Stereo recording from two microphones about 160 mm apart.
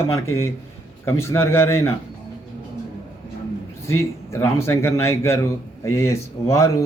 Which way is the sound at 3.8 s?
15° left (ahead or behind).